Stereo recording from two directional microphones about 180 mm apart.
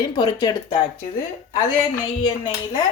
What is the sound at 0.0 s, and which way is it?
Speech, 25° left (ahead or behind).